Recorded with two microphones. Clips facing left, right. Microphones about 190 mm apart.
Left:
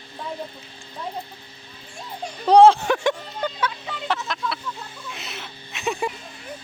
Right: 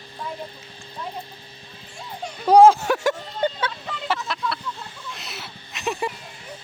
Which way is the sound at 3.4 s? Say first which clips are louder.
Right 2 dB; 25° right (ahead or behind).